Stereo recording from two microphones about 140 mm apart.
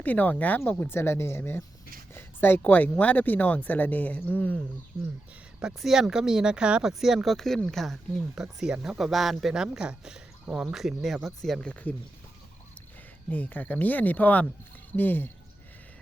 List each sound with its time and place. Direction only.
0.0 s speech: 10° left (ahead or behind)
5.5 s speech: 5° right (ahead or behind)
13.3 s speech: 10° left (ahead or behind)